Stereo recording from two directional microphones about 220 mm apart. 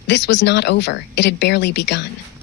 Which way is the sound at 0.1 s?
55° left (ahead or behind).